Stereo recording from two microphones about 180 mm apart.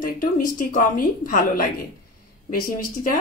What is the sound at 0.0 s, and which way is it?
Speech, 45° left (ahead or behind).